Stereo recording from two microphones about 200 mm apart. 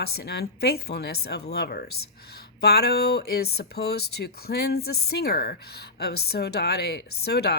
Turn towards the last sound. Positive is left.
turn(degrees=55)  # may be behind; listen again after turning